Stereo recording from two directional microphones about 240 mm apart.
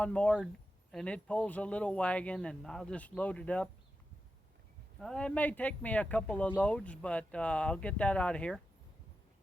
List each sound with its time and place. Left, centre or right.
0.0 s speech: centre
4.9 s speech: centre